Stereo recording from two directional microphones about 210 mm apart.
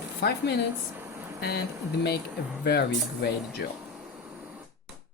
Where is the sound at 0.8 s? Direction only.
10° right (ahead or behind).